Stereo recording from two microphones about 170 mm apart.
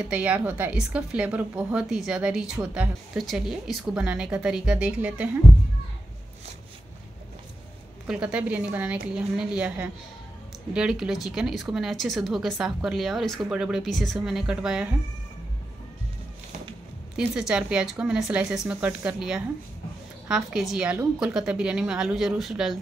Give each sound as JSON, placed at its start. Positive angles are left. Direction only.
{"t": 0.1, "sound": "a woman's voice", "side_deg": -10}
{"t": 8.1, "sound": "a woman's voice", "side_deg": -5}
{"t": 17.2, "sound": "speech", "side_deg": -5}